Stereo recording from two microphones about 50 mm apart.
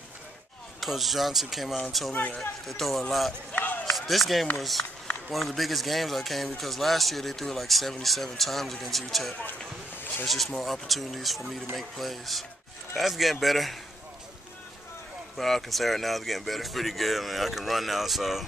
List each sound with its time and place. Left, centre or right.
0.7 s speech: centre
3.5 s run: left
3.9 s speech: centre
15.3 s speech: centre